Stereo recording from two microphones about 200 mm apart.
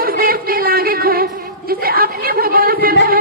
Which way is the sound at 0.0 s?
45° right (ahead or behind).